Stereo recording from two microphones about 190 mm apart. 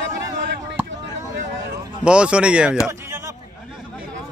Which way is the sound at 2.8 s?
15° right (ahead or behind).